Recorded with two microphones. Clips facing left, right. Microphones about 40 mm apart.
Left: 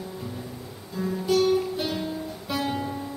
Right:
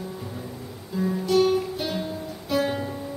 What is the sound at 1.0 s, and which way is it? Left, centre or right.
Music, centre.